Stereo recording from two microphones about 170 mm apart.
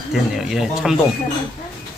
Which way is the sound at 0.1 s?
5° right (ahead or behind).